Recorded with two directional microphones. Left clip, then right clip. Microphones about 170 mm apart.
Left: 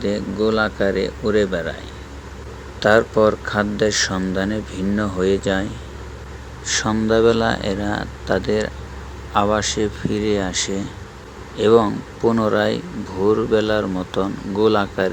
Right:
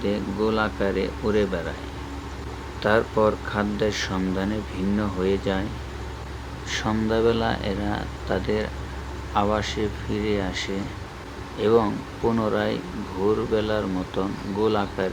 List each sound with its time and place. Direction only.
0.0 s speech: 25° left (ahead or behind)
2.8 s speech: 35° left (ahead or behind)
6.7 s speech: 30° left (ahead or behind)